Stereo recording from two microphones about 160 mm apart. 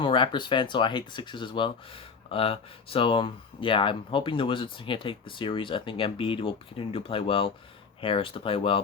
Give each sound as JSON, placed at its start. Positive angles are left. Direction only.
{"t": 0.0, "sound": "speech", "side_deg": 30}